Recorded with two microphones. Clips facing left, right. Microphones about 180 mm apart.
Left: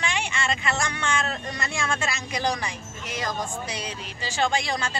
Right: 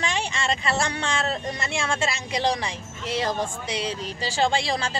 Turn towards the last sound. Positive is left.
turn(degrees=-30)  # may be behind; listen again after turning